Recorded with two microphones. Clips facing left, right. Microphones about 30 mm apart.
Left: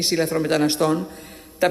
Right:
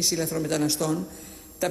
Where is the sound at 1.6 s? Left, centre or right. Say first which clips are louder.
Left 8 dB; left.